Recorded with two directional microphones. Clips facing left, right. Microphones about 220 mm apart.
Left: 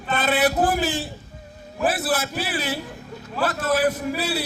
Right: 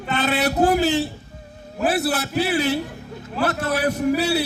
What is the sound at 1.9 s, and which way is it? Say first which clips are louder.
A man's voice: right 3 dB; 65° right (ahead or behind).